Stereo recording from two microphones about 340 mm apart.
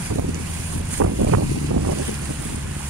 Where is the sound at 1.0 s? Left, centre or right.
Right.